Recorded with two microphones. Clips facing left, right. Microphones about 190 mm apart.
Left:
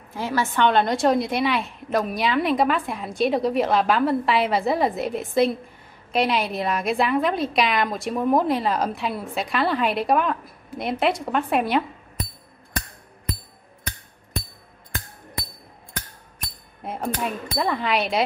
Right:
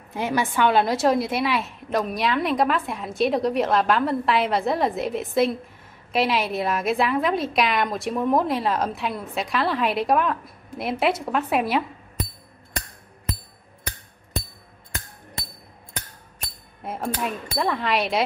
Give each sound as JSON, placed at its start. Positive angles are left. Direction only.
{"t": 0.1, "sound": "a woman's voice", "side_deg": -15}
{"t": 0.7, "sound": "a woman's voice", "side_deg": -5}
{"t": 16.8, "sound": "a woman's voice", "side_deg": 0}